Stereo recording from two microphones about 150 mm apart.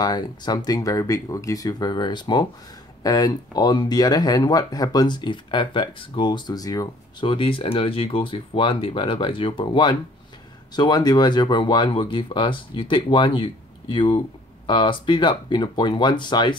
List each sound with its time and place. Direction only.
0.0 s speech: 25° left (ahead or behind)